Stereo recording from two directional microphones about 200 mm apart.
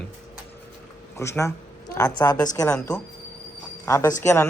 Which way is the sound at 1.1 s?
15° left (ahead or behind).